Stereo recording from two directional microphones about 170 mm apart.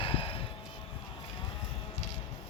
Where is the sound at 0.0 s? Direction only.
30° left (ahead or behind).